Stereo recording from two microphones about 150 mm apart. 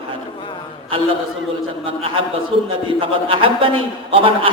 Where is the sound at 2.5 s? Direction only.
40° right (ahead or behind).